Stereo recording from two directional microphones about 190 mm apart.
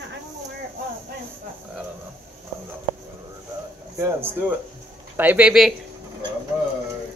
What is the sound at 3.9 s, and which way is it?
Speech, 10° right (ahead or behind).